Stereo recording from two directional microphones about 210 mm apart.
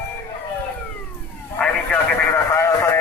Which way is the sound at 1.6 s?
5° left (ahead or behind).